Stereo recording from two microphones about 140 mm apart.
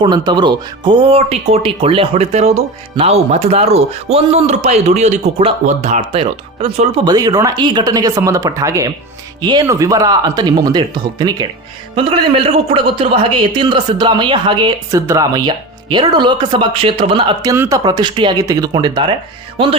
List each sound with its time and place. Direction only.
0.0 s speech: 30° right (ahead or behind); by 6.0 s 55° right (ahead or behind)
6.1 s speech: 45° right (ahead or behind)
7.0 s speech: 30° right (ahead or behind)
11.9 s speech: 40° right (ahead or behind)
14.8 s speech: 20° right (ahead or behind); by 17.3 s 40° right (ahead or behind)
17.4 s speech: 20° right (ahead or behind)